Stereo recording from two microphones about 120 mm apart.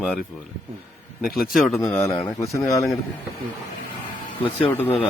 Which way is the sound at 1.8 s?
25° left (ahead or behind).